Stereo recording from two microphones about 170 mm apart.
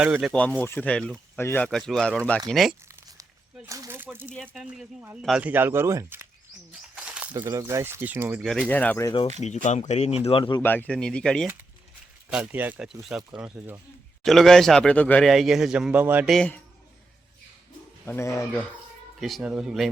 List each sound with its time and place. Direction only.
0.0 s speech: 5° right (ahead or behind)
0.6 s speech: 10° left (ahead or behind)
2.9 s crumpling: 15° right (ahead or behind)
4.4 s speech: 5° right (ahead or behind)
6.9 s a sound: 5° right (ahead or behind)
7.4 s speech: 15° right (ahead or behind)
8.4 s speech: centre (ahead or behind)
8.6 s speech: 10° left (ahead or behind)
9.6 s speech: 45° left (ahead or behind)
10.6 s speech: 10° left (ahead or behind)
12.3 s speech: 10° right (ahead or behind)
16.3 s speech: 5° left (ahead or behind)
18.0 s speech: 15° left (ahead or behind)
19.2 s speech: centre (ahead or behind)